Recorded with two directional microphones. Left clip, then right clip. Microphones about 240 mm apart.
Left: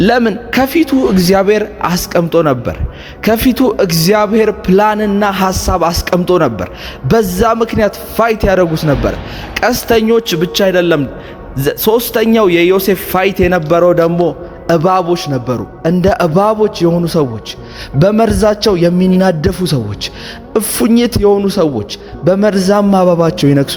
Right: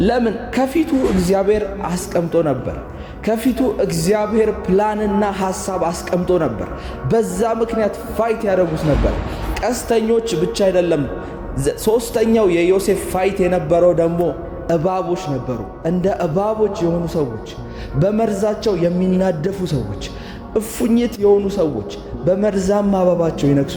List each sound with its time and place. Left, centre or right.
0.0 s a man's voice: left